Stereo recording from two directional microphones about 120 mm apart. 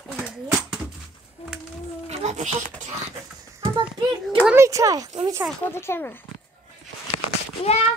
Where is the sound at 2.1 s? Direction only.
75° right (ahead or behind).